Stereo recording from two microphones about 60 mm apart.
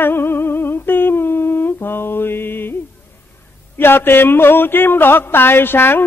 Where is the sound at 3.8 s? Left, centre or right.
Left.